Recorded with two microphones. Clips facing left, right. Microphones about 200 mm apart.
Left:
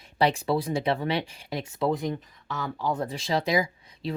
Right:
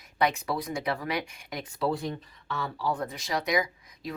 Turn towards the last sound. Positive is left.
turn(degrees=30)  # may be behind; listen again after turning